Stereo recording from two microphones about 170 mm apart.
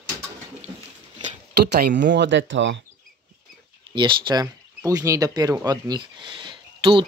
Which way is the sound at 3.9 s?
30° right (ahead or behind).